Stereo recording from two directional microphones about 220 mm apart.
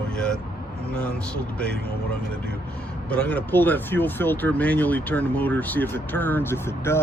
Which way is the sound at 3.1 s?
5° left (ahead or behind).